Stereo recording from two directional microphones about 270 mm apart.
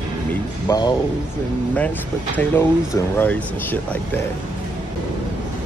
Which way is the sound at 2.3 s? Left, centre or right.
Centre.